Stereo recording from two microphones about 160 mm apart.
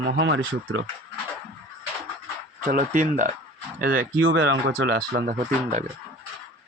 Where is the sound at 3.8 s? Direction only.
65° right (ahead or behind).